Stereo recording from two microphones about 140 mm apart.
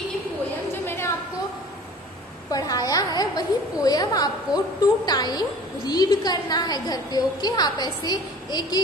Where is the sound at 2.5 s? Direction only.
25° left (ahead or behind).